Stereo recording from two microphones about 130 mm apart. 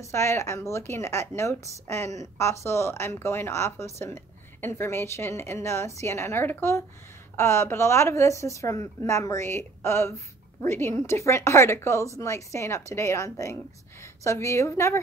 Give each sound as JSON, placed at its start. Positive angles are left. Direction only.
{"t": 0.0, "sound": "a woman's voice", "side_deg": 20}